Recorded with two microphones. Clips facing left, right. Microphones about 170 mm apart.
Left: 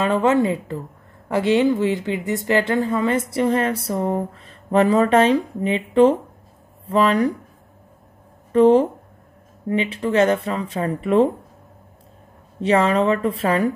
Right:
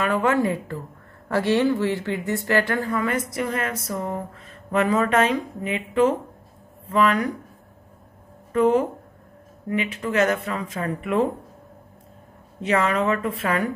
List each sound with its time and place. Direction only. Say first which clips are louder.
0.0 s speech: left 3 dB; 25° left (ahead or behind)
8.5 s speech: left 5 dB; 30° left (ahead or behind)
12.6 s speech: left 4 dB; 30° left (ahead or behind)